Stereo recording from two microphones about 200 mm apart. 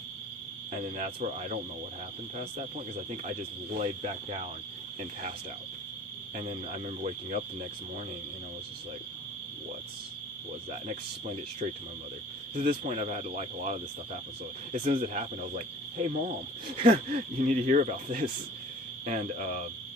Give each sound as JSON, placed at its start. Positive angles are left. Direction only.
{"t": 0.7, "sound": "speech", "side_deg": -40}
{"t": 6.3, "sound": "speech", "side_deg": -35}
{"t": 12.5, "sound": "speech", "side_deg": -40}